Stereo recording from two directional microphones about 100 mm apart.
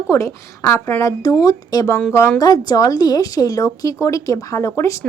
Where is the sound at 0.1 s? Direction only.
30° left (ahead or behind).